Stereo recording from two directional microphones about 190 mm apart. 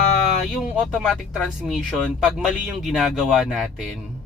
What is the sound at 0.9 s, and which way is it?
Speech, centre (ahead or behind).